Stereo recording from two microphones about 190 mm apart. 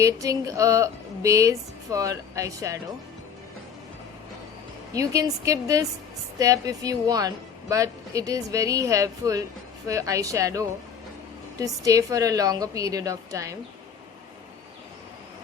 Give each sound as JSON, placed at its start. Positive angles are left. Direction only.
{"t": 0.0, "sound": "a woman's voice", "side_deg": -15}
{"t": 4.9, "sound": "a woman's voice", "side_deg": -15}